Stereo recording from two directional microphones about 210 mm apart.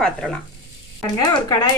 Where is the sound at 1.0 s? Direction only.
20° left (ahead or behind).